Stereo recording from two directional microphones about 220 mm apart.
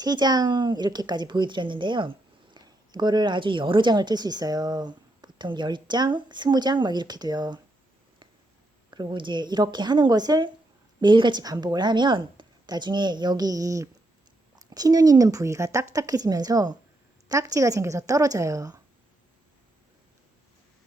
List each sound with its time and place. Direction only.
0.0 s speech: 20° right (ahead or behind)
8.9 s a woman's voice: 20° right (ahead or behind)